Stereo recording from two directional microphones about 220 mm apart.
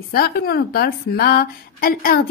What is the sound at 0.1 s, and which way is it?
A woman's voice, 45° left (ahead or behind).